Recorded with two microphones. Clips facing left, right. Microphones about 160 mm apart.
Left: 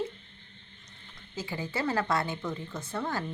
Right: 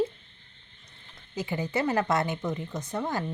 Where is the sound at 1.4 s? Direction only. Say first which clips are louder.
Right 5 dB; 20° right (ahead or behind).